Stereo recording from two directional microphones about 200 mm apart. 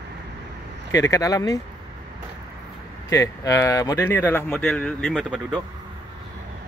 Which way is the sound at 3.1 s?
15° left (ahead or behind).